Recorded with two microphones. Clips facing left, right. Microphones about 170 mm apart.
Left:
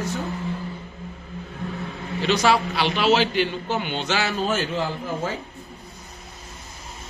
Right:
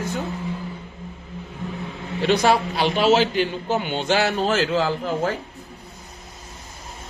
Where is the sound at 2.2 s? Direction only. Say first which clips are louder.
Right 2 dB; 55° right (ahead or behind); by 5.1 s 90° right.